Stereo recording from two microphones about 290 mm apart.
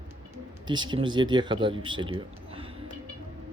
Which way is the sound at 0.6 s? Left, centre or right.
Centre.